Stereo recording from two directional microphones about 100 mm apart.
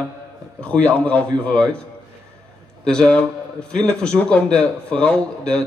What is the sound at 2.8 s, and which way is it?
A man's voice, 10° left (ahead or behind).